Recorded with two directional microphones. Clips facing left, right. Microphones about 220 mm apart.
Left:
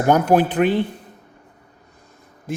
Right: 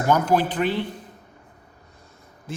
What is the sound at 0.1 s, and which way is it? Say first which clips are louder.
Speech: left 4 dB; 55° left (ahead or behind).